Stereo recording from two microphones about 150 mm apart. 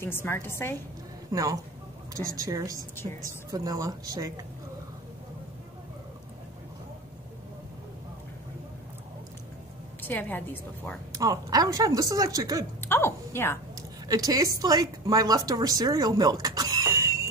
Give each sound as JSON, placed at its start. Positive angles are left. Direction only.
{"t": 0.0, "sound": "a woman's voice", "side_deg": 15}
{"t": 1.3, "sound": "a woman's voice", "side_deg": -20}
{"t": 3.0, "sound": "a woman's voice", "side_deg": 20}
{"t": 3.5, "sound": "a woman's voice", "side_deg": -25}
{"t": 10.0, "sound": "a woman's voice", "side_deg": 10}
{"t": 11.1, "sound": "a woman's voice", "side_deg": -25}
{"t": 12.8, "sound": "a woman's voice", "side_deg": 15}
{"t": 14.0, "sound": "a woman's voice", "side_deg": -25}